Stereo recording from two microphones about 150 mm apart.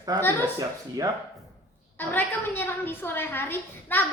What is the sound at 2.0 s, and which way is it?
A woman's voice, 15° left (ahead or behind).